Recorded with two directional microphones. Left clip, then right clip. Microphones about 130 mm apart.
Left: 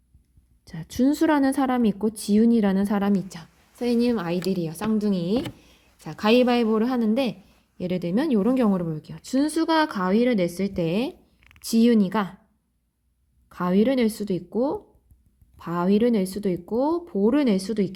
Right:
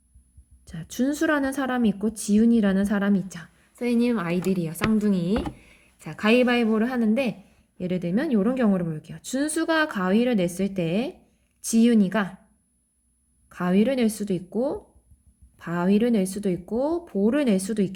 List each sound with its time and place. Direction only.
0.7 s a woman's voice: 35° left (ahead or behind)
13.5 s a woman's voice: 30° left (ahead or behind)